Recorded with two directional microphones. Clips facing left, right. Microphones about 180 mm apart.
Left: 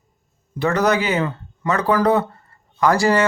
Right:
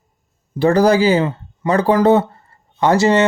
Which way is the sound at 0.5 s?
30° right (ahead or behind).